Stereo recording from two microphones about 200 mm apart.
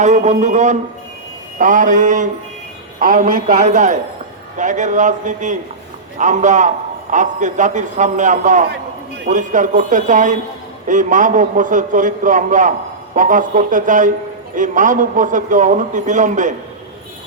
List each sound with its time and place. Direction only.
0.0 s a man's voice: 35° right (ahead or behind)